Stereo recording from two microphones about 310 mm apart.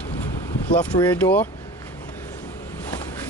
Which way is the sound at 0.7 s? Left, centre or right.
Centre.